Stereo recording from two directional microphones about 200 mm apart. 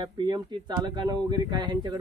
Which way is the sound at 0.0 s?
20° right (ahead or behind).